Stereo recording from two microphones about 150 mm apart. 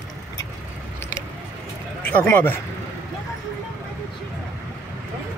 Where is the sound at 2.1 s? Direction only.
15° left (ahead or behind).